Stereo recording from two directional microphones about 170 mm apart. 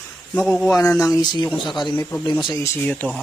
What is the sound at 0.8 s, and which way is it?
Speech, 15° left (ahead or behind).